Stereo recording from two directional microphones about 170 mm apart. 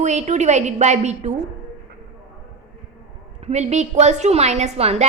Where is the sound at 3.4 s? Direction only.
40° right (ahead or behind).